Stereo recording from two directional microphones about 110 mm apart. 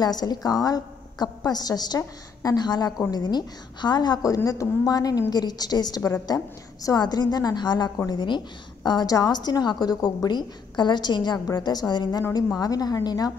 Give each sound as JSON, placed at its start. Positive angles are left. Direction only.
{"t": 0.0, "sound": "a woman's voice", "side_deg": 35}